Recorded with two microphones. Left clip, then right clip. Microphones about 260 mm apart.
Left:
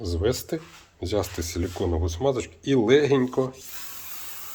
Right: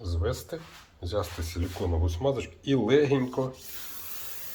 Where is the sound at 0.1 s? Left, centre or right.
Left.